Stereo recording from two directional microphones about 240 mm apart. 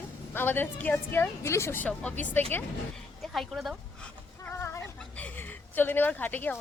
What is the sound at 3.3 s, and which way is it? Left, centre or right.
Chicken, centre.